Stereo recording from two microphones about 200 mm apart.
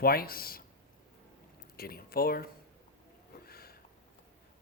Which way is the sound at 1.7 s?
50° left (ahead or behind).